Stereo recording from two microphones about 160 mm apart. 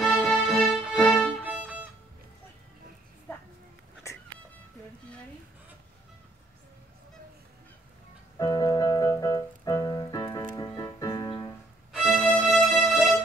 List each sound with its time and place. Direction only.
0.0 s music: centre (ahead or behind)
1.3 s music: 10° right (ahead or behind)
3.3 s a sound: 10° left (ahead or behind)
8.4 s piano: 25° left (ahead or behind)
11.9 s music: centre (ahead or behind)